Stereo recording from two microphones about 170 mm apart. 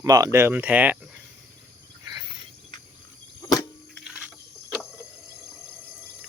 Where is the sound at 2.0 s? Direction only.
20° right (ahead or behind).